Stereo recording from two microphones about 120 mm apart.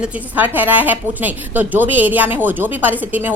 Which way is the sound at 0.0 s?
15° right (ahead or behind).